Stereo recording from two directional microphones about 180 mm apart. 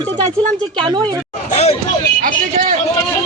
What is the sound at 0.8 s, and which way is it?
Speech, 25° right (ahead or behind).